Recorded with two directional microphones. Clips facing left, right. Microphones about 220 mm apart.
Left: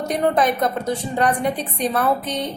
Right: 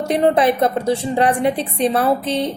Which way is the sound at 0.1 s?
30° right (ahead or behind).